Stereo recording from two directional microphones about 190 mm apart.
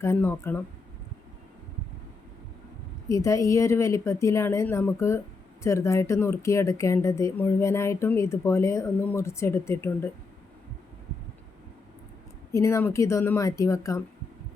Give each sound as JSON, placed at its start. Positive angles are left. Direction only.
{"t": 0.0, "sound": "speech", "side_deg": 15}
{"t": 3.1, "sound": "speech", "side_deg": 15}
{"t": 12.5, "sound": "speech", "side_deg": 15}